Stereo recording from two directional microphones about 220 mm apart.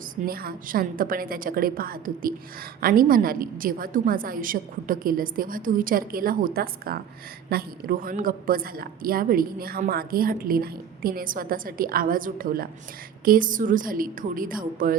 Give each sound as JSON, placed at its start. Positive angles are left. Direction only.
{"t": 0.3, "sound": "a woman's voice", "side_deg": -40}